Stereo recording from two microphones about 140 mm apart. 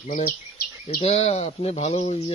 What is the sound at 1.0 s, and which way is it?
Speech, 50° left (ahead or behind).